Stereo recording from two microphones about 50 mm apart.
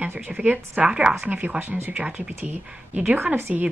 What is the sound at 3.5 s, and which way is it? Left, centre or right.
Speech, centre.